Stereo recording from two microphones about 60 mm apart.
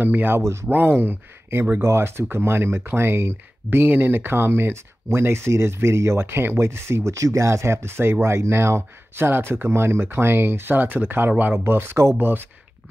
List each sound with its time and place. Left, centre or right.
0.0 s speech: right
0.4 s speech: right
0.7 s speech: right